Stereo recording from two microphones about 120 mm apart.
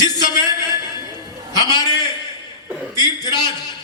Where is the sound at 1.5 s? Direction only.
35° left (ahead or behind).